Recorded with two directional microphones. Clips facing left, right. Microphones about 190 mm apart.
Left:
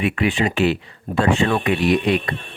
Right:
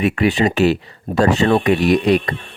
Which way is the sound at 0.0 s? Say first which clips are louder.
Right 4 dB; 40° right (ahead or behind).